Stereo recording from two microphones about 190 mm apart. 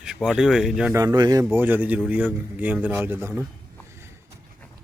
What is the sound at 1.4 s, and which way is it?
A man's voice, 10° right (ahead or behind).